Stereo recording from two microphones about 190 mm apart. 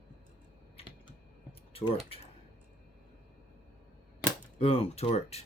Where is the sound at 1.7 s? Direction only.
30° left (ahead or behind).